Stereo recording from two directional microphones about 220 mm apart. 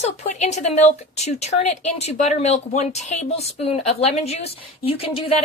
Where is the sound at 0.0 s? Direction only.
30° left (ahead or behind).